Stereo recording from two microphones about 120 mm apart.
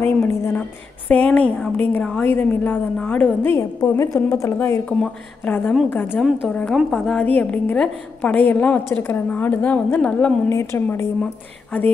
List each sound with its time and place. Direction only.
0.0 s a woman's voice: 20° left (ahead or behind)
4.6 s a woman's voice: 10° left (ahead or behind)
6.1 s a woman's voice: 5° right (ahead or behind); by 11.1 s 20° left (ahead or behind)